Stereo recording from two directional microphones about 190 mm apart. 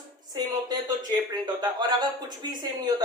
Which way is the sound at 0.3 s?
20° right (ahead or behind).